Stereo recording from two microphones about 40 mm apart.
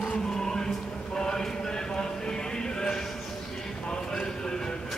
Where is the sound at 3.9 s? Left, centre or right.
Centre.